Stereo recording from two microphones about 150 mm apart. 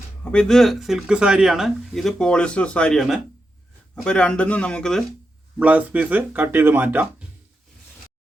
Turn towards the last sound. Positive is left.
turn(degrees=-10)  # may be behind; listen again after turning